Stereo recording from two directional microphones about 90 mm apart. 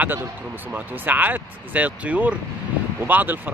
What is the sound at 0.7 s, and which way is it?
Speech, 20° right (ahead or behind).